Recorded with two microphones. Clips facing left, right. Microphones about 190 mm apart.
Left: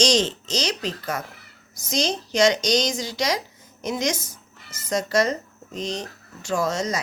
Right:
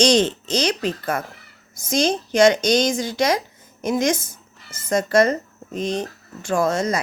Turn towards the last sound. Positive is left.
turn(degrees=-55)  # may be behind; listen again after turning